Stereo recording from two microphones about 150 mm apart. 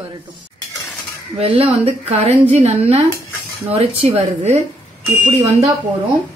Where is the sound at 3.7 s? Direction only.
45° right (ahead or behind).